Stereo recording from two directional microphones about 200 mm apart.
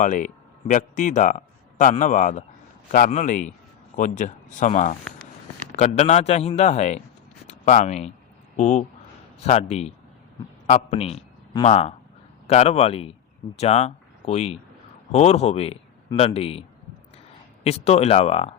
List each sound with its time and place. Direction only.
0.0 s speech: 40° left (ahead or behind)
6.0 s a man's voice: 35° left (ahead or behind)